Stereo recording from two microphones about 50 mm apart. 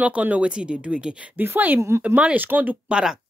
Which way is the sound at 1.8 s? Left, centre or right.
Right.